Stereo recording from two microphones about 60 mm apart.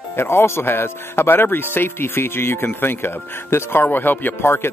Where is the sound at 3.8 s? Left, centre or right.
Left.